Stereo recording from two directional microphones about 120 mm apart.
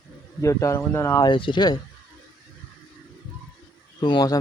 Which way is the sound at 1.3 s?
45° left (ahead or behind).